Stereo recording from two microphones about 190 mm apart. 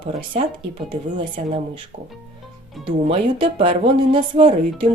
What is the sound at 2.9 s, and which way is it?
Speech, 30° right (ahead or behind).